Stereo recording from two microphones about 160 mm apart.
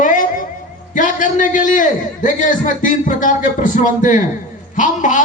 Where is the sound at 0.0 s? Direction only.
55° left (ahead or behind).